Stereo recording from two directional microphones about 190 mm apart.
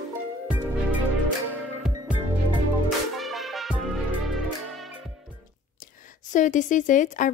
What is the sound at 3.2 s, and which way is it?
Music, centre (ahead or behind).